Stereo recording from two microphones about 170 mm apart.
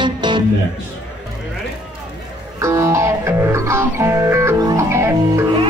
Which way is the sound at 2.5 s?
20° right (ahead or behind).